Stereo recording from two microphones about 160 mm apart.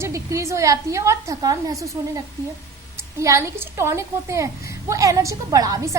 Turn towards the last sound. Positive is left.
turn(degrees=-20)  # may be behind; listen again after turning